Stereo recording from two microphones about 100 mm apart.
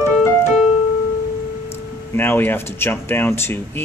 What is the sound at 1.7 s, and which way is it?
Speech, 20° left (ahead or behind).